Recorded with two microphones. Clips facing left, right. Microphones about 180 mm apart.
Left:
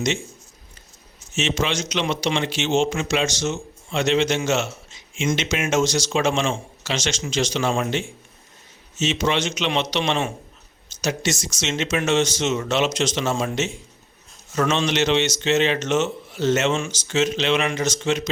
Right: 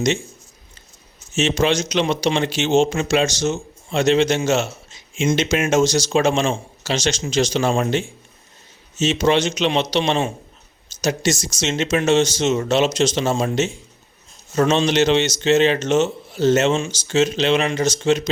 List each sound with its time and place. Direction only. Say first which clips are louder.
1.3 s speech: right 5 dB; 35° right (ahead or behind)